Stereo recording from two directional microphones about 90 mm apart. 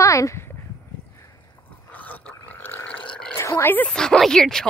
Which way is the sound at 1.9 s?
20° left (ahead or behind).